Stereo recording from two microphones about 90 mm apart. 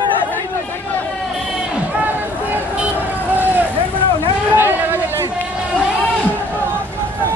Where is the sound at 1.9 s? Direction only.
15° right (ahead or behind).